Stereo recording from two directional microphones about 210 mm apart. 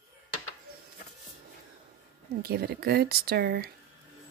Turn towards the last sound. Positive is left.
turn(degrees=-50)  # may be behind; listen again after turning